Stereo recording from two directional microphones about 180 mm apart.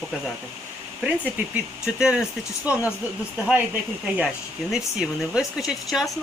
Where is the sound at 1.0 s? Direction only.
5° right (ahead or behind).